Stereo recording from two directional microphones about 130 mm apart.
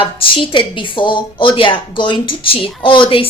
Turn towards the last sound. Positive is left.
turn(degrees=40)  # may be behind; listen again after turning